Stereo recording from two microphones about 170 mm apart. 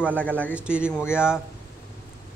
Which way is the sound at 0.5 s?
5° right (ahead or behind).